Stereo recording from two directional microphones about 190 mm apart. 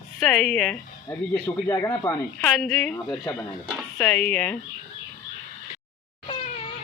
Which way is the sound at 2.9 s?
15° left (ahead or behind).